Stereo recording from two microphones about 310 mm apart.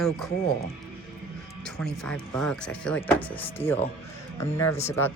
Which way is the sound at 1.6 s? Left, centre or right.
Centre.